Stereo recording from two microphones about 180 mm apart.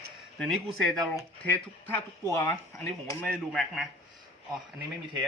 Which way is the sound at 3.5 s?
Centre (ahead or behind).